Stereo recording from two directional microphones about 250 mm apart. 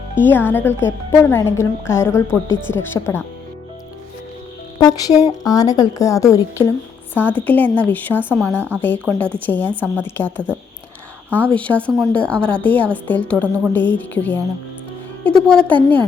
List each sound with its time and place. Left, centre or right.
0.2 s a woman's voice: centre
2.5 s speech: left
2.7 s a woman's voice: centre
4.8 s a woman's voice: centre
15.4 s a woman's voice: centre